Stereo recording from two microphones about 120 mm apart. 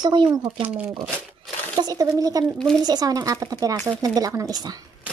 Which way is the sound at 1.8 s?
30° right (ahead or behind).